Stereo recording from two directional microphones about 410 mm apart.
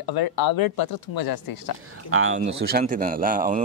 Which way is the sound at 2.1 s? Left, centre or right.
Right.